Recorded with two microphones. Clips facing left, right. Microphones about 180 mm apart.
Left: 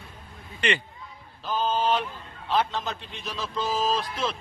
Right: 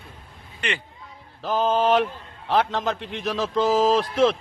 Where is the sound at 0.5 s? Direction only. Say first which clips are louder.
Left 3 dB; 5° right (ahead or behind).